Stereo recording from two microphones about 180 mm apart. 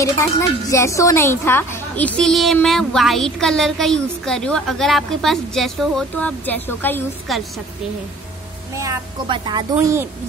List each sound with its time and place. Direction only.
0.0 s a woman's voice: 15° left (ahead or behind); by 7.6 s centre (ahead or behind)
8.7 s speech: 20° right (ahead or behind)